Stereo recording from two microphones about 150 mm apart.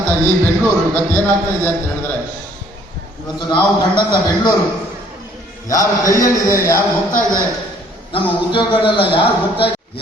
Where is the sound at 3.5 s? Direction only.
30° left (ahead or behind).